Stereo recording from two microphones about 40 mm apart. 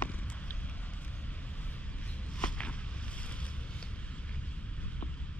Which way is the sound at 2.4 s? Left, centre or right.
Left.